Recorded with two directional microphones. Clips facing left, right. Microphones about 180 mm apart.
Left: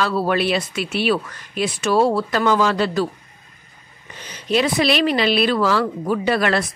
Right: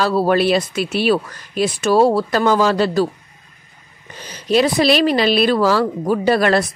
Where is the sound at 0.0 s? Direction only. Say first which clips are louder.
Right 4 dB; 40° right (ahead or behind).